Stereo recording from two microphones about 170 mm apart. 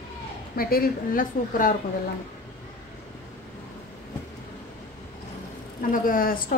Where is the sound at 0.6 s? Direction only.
60° left (ahead or behind).